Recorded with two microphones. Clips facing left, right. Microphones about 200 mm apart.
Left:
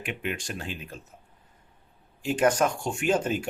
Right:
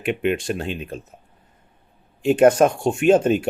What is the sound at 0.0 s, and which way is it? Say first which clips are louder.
Speech: right 11 dB; 65° right (ahead or behind).